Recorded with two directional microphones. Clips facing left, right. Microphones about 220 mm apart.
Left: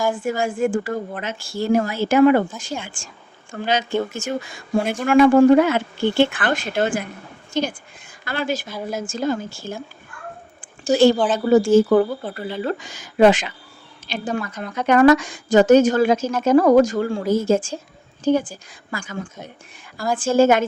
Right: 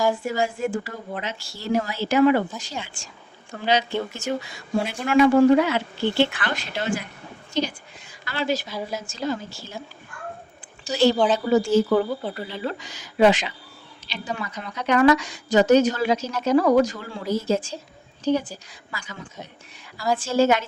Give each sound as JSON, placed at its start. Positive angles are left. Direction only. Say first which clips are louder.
{"t": 0.1, "sound": "a woman's voice", "louder": "left 2 dB", "side_deg": 50}
{"t": 10.6, "sound": "a sound", "louder": "left 6 dB", "side_deg": 50}
{"t": 11.3, "sound": "speech", "louder": "left 5 dB", "side_deg": 50}